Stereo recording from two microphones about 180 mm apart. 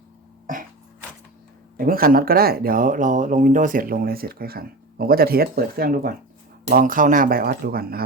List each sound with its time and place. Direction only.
1.8 s speech: 55° right (ahead or behind)